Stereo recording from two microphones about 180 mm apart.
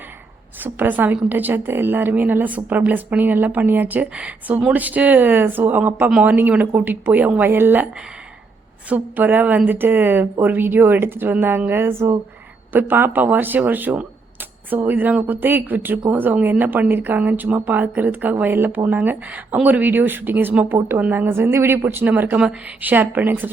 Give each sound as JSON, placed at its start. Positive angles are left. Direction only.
{"t": 0.6, "sound": "a woman's voice", "side_deg": -10}
{"t": 8.9, "sound": "a woman's voice", "side_deg": -10}